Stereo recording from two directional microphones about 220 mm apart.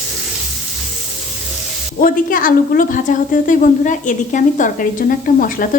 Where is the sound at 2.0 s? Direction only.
40° left (ahead or behind).